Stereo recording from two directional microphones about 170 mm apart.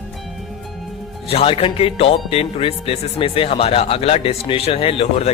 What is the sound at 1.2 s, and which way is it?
Speech, 35° left (ahead or behind).